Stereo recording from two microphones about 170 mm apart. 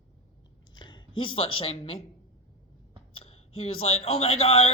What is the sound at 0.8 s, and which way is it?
Speech, 25° left (ahead or behind).